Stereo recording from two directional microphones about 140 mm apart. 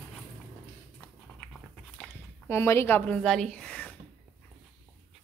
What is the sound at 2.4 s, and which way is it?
Speech, 20° left (ahead or behind).